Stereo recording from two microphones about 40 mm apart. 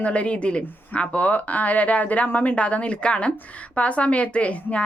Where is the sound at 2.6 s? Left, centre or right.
Left.